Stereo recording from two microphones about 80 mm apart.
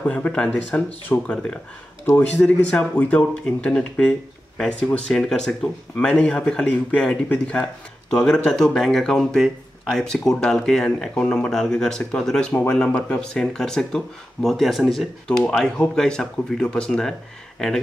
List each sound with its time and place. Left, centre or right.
0.0 s speech: centre